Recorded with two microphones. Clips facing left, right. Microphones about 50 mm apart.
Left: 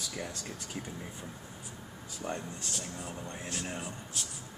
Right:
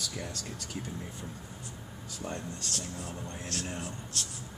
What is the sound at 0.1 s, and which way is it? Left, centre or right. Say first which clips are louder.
Speech: even; centre.